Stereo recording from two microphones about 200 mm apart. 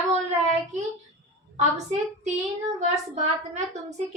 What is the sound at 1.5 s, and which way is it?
A woman's voice, 35° right (ahead or behind).